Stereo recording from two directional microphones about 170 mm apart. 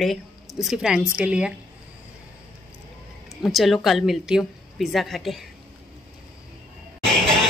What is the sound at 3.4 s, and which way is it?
Speech, centre (ahead or behind).